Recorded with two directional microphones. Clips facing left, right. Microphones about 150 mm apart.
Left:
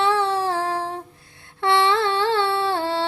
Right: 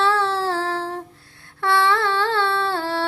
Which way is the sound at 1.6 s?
20° left (ahead or behind).